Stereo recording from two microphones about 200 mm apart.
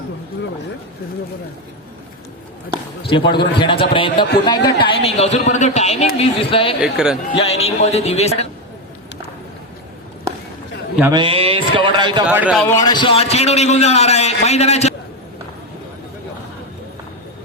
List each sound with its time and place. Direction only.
3.1 s a man's voice: 25° left (ahead or behind)
6.8 s speech: 5° right (ahead or behind)
7.3 s a man's voice: 30° left (ahead or behind)
11.1 s speech: 25° right (ahead or behind)
12.2 s speech: 5° right (ahead or behind)
12.5 s a man's voice: 15° left (ahead or behind); by 14.9 s 35° left (ahead or behind)